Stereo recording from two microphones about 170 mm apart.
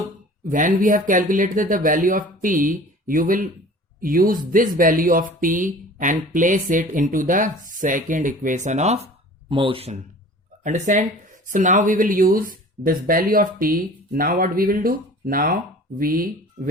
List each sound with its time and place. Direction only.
0.4 s speech: 50° right (ahead or behind); by 10.0 s 35° right (ahead or behind)
10.6 s speech: 50° right (ahead or behind)